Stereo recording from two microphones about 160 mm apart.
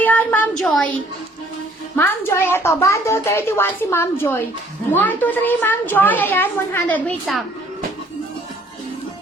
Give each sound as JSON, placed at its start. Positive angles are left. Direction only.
{"t": 0.0, "sound": "a woman's voice", "side_deg": 10}
{"t": 2.0, "sound": "a woman's voice", "side_deg": 15}